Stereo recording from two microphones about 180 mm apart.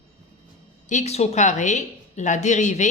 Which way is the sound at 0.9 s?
40° left (ahead or behind).